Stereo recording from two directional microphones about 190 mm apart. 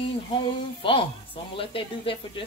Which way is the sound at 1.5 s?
30° left (ahead or behind).